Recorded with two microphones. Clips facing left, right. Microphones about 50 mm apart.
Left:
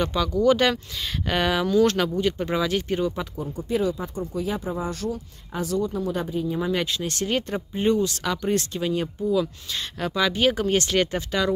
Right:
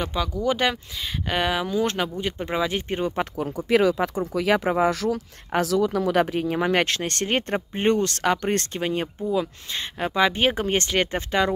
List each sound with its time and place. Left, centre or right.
0.0 s speech: centre
3.3 s speech: right